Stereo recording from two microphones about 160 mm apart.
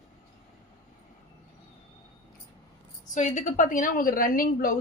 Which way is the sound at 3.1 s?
50° left (ahead or behind).